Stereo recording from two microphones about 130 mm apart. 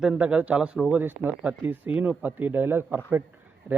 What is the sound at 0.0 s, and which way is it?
A man's voice, 5° right (ahead or behind).